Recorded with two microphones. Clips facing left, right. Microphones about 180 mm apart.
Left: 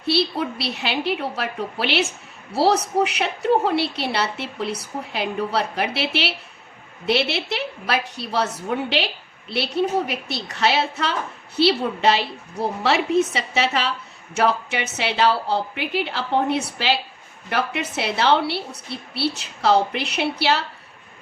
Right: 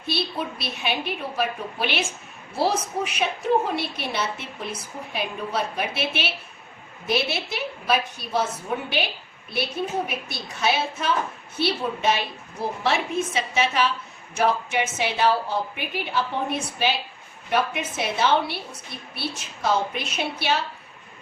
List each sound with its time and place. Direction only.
0.0 s a woman's voice: 70° left (ahead or behind)